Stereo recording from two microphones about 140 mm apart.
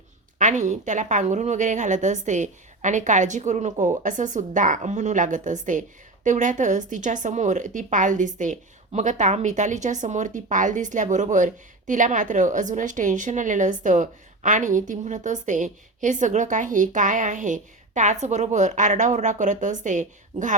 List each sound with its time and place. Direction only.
0.3 s speech: 60° right (ahead or behind)